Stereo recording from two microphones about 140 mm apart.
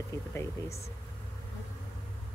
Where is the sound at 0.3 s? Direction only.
20° left (ahead or behind).